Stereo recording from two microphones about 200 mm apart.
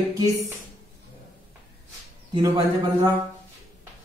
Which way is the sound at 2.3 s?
25° right (ahead or behind).